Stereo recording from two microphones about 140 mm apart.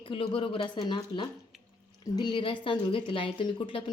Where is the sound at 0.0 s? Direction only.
40° left (ahead or behind).